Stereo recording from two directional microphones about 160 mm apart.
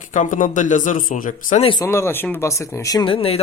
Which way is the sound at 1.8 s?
15° left (ahead or behind).